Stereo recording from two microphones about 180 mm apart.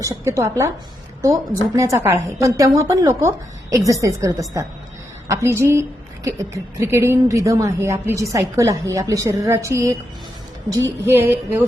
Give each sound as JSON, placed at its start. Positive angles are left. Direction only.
{"t": 0.0, "sound": "speech", "side_deg": -15}
{"t": 1.7, "sound": "speech", "side_deg": -15}